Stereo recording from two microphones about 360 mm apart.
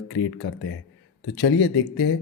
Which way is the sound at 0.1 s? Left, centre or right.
Left.